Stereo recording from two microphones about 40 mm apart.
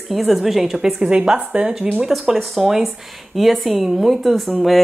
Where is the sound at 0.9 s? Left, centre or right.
Centre.